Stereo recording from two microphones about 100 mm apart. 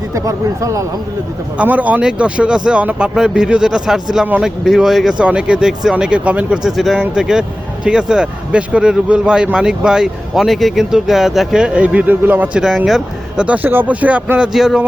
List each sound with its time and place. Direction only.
0.1 s speech: 30° right (ahead or behind)
1.5 s speech: 15° right (ahead or behind)
12.6 s speech: 5° right (ahead or behind)